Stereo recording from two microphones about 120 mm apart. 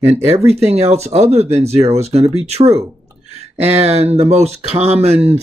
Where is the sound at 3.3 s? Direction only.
65° right (ahead or behind).